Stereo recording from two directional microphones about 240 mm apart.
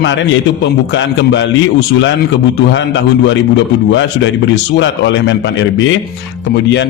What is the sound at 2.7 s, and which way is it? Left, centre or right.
A man's voice, left.